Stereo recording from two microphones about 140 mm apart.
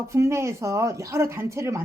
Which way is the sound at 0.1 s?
20° right (ahead or behind).